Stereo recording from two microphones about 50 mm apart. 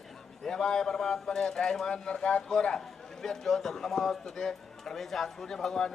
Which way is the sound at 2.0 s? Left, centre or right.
Centre.